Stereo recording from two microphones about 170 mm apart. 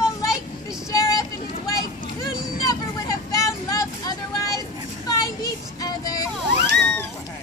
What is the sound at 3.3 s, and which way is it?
Vehicle, 20° left (ahead or behind).